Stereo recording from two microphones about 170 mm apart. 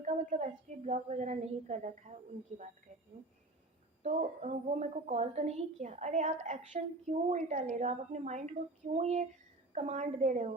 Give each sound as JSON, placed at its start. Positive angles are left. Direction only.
{"t": 0.0, "sound": "a woman's voice", "side_deg": -40}
{"t": 4.0, "sound": "a woman's voice", "side_deg": -40}